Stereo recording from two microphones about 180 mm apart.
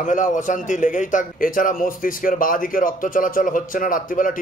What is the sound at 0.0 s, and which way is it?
A man's voice, 45° left (ahead or behind).